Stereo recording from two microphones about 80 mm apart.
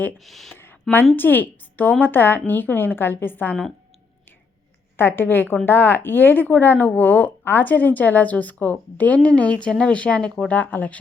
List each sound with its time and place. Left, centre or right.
0.2 s speech: centre
0.5 s a sound: left
1.1 s speech: left
4.9 s speech: left